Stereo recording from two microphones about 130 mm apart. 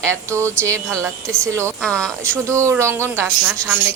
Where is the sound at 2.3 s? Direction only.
20° right (ahead or behind).